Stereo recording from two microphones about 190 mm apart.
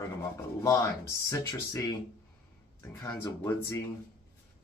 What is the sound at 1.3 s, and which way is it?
Speech, 15° left (ahead or behind).